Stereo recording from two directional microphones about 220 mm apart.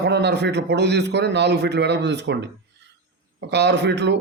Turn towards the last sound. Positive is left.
turn(degrees=-50)  # may be behind; listen again after turning